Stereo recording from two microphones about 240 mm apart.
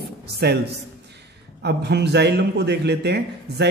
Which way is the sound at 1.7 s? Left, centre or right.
Right.